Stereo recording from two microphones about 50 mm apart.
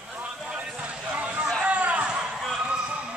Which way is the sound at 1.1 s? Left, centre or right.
Right.